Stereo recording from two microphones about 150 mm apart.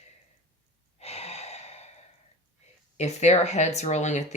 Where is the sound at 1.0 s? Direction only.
45° left (ahead or behind).